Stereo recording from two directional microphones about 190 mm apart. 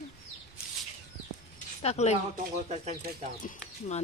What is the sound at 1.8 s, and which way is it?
Speech, 35° left (ahead or behind).